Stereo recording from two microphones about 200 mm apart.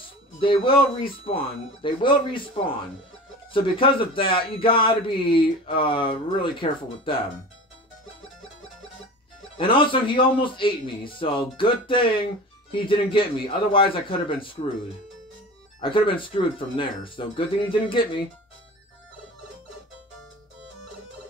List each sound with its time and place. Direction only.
0.4 s a man's voice: 25° left (ahead or behind)
3.5 s a man's voice: 25° left (ahead or behind)
9.6 s a man's voice: 25° left (ahead or behind)
15.8 s a man's voice: 25° left (ahead or behind)